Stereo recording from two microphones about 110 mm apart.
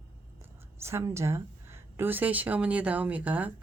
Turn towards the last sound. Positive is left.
turn(degrees=-15)  # may be behind; listen again after turning